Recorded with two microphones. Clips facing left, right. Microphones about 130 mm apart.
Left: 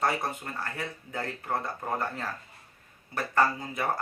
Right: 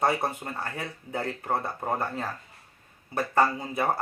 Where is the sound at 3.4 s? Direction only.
20° right (ahead or behind).